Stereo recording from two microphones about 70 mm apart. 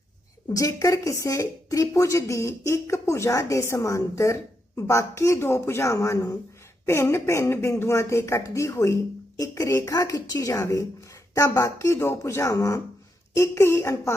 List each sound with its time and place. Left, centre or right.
0.4 s speech: left
6.8 s speech: left